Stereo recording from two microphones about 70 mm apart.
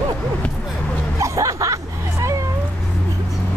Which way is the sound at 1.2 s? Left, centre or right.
Right.